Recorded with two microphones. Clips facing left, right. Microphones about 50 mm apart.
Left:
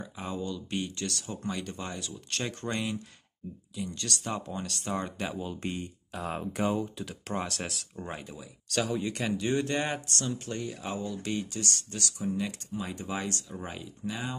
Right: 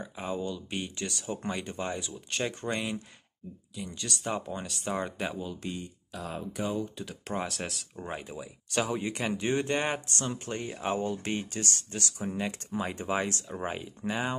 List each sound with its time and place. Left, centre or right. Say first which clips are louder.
0.0 s speech: right 2 dB; centre
2.4 s speech: right 1 dB; centre
5.6 s speech: left 2 dB; left
7.0 s speech: even; centre
8.2 s speech: right 3 dB; centre